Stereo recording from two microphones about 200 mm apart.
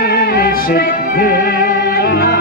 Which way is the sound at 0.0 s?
45° left (ahead or behind).